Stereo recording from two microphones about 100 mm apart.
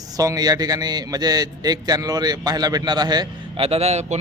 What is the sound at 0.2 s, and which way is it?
A man's voice, 35° right (ahead or behind).